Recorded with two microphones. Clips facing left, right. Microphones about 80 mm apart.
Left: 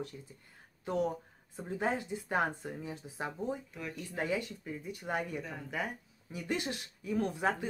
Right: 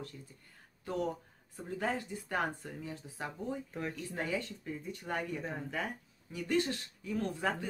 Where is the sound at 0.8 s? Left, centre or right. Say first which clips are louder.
Left 3 dB; centre.